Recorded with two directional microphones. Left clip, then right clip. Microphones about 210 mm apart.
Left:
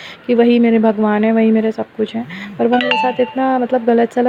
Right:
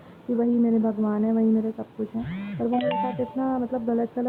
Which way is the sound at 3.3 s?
55° left (ahead or behind).